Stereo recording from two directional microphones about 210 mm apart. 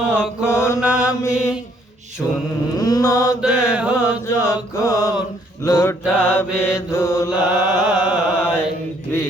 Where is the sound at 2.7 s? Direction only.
15° left (ahead or behind).